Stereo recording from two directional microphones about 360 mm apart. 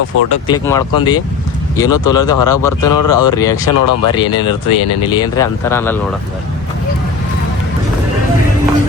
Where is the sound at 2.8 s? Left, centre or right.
Left.